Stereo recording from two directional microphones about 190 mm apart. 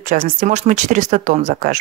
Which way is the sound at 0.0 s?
45° right (ahead or behind).